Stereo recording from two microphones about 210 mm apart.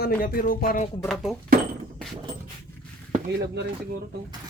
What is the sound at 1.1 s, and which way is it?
Speech, centre (ahead or behind).